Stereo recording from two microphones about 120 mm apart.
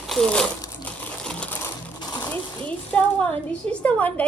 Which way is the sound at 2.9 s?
10° left (ahead or behind).